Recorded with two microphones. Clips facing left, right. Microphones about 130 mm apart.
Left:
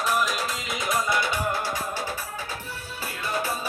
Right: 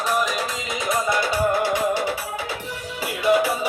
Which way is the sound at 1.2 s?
45° right (ahead or behind).